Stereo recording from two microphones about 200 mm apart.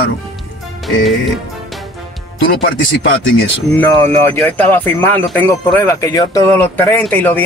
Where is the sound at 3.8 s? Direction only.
10° left (ahead or behind).